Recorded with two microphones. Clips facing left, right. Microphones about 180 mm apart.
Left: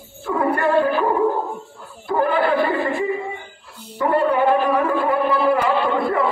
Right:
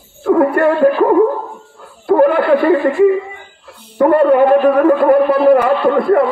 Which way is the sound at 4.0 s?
55° right (ahead or behind).